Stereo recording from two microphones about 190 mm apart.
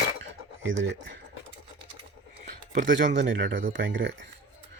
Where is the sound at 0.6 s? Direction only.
75° right (ahead or behind).